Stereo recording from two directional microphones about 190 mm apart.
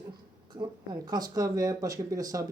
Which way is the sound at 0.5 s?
20° right (ahead or behind).